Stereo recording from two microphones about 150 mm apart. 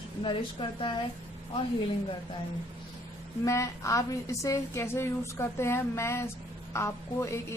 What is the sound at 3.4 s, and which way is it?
A woman's voice, 20° left (ahead or behind).